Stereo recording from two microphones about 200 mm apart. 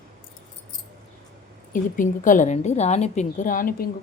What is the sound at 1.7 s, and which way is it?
A woman's voice, 40° left (ahead or behind).